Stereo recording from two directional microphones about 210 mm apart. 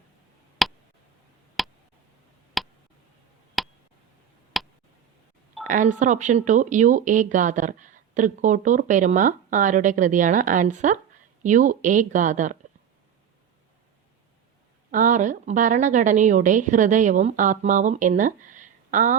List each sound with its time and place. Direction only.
0.6 s a sound: centre (ahead or behind)
1.6 s tick: centre (ahead or behind)
2.6 s a sound: centre (ahead or behind)
4.5 s tick: centre (ahead or behind)
5.6 s speech: 35° right (ahead or behind)
14.8 s speech: 40° right (ahead or behind)